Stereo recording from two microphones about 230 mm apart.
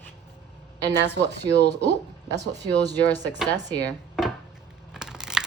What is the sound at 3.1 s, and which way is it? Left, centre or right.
Speech, centre.